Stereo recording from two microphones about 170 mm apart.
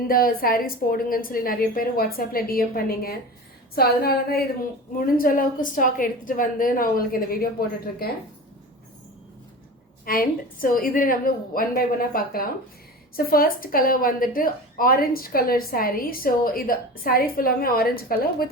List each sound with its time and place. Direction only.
0.1 s a woman's voice: 60° left (ahead or behind)
10.1 s a woman's voice: 55° left (ahead or behind)